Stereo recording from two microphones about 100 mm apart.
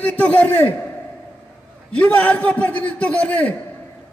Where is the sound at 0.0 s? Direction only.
15° left (ahead or behind).